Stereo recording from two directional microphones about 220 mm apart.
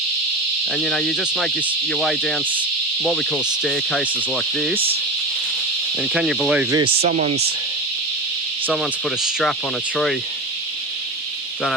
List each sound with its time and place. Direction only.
0.7 s cricket: 5° left (ahead or behind)
6.0 s cricket: centre (ahead or behind)
6.7 s speech: 25° right (ahead or behind)
8.6 s cricket: centre (ahead or behind)